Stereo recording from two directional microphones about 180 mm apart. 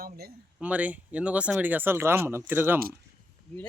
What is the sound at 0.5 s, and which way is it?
Speech, 10° right (ahead or behind).